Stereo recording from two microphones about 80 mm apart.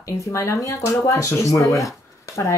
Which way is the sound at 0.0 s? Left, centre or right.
Left.